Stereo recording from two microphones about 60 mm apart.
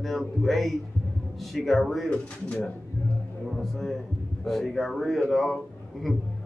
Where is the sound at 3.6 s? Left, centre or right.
Centre.